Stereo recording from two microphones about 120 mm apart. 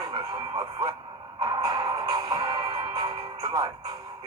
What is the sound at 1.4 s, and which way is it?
Music, 30° right (ahead or behind).